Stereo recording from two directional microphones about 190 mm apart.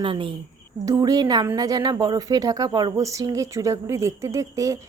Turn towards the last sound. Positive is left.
turn(degrees=-15)  # may be behind; listen again after turning